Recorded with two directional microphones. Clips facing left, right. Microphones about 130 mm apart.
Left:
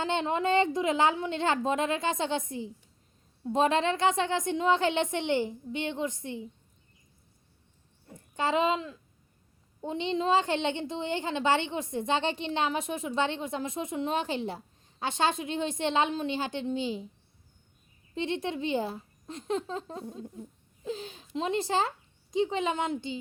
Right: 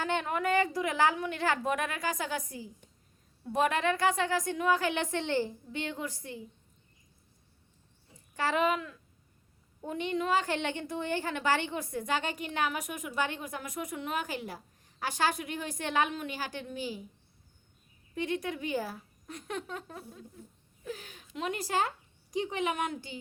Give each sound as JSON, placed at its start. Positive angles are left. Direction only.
{"t": 0.0, "sound": "a woman's voice", "side_deg": 25}
{"t": 8.4, "sound": "a woman's voice", "side_deg": 20}
{"t": 18.1, "sound": "a woman's voice", "side_deg": 25}